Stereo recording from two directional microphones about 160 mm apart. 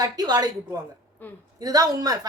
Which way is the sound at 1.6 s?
25° right (ahead or behind).